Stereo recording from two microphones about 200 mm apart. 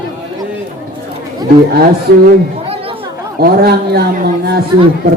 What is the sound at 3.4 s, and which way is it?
Speech, 50° right (ahead or behind).